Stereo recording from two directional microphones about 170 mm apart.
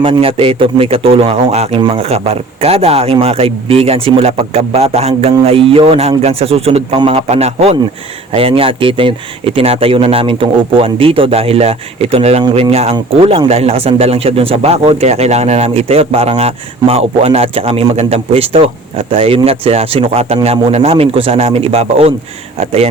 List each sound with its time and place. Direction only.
0.0 s speech: 35° right (ahead or behind)